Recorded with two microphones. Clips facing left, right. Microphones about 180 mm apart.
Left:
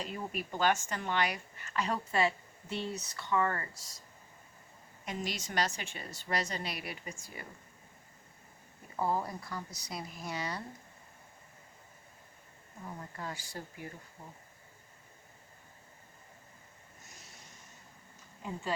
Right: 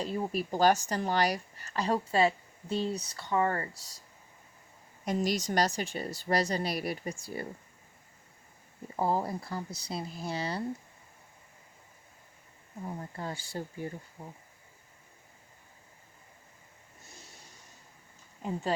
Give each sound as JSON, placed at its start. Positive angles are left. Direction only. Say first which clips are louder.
{"t": 0.0, "sound": "a woman's voice", "louder": "right 7 dB", "side_deg": -35}
{"t": 5.0, "sound": "a woman's voice", "louder": "right 9 dB", "side_deg": -40}
{"t": 9.0, "sound": "speech", "louder": "right 3 dB", "side_deg": -30}
{"t": 12.8, "sound": "speech", "louder": "right 4 dB", "side_deg": -30}